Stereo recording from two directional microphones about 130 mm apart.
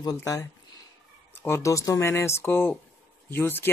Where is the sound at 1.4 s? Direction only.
20° left (ahead or behind).